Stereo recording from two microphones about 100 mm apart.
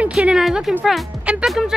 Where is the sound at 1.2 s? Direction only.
10° right (ahead or behind).